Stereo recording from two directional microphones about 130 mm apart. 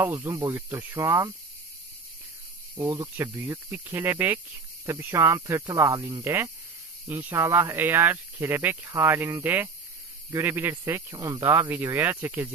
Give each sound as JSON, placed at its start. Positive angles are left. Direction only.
{"t": 0.0, "sound": "speech", "side_deg": -15}
{"t": 2.7, "sound": "speech", "side_deg": -20}
{"t": 6.2, "sound": "speech", "side_deg": -15}